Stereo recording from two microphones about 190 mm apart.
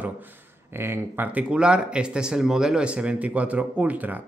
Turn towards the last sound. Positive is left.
turn(degrees=-10)  # may be behind; listen again after turning